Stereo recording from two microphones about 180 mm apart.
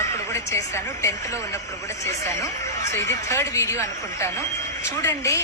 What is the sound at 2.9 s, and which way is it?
A woman's voice, 15° left (ahead or behind).